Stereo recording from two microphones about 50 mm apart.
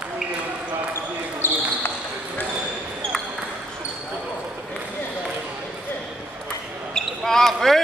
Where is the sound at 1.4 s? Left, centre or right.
Left.